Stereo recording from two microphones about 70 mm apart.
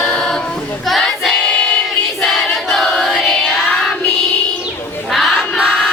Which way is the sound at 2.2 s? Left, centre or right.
Centre.